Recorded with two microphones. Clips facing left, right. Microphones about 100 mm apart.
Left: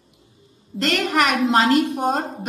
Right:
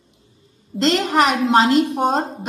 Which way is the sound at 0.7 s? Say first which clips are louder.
Right 3 dB; 25° right (ahead or behind).